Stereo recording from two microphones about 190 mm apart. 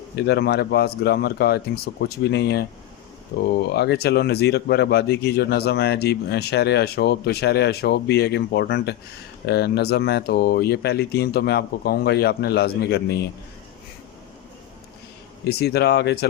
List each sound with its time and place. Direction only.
0.2 s speech: 60° left (ahead or behind)
15.4 s speech: 55° left (ahead or behind)